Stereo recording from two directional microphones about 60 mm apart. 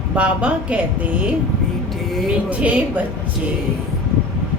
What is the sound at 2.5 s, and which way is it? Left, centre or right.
Speech, right.